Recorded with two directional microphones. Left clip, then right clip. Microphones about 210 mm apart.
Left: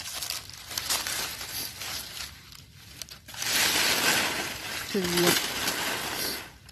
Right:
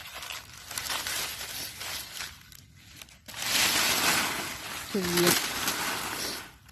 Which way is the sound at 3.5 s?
45° right (ahead or behind).